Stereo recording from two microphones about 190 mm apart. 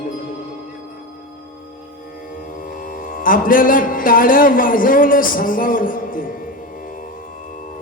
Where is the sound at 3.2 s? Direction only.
45° left (ahead or behind).